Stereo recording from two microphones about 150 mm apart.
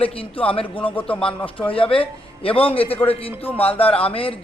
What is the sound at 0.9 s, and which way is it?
Speech, 10° left (ahead or behind).